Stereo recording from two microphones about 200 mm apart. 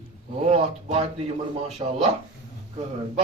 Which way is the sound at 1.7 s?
30° right (ahead or behind).